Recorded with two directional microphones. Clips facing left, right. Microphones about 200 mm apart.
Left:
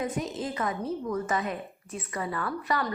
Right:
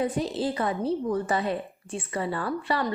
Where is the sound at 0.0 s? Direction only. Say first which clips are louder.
Right 5 dB; 30° right (ahead or behind).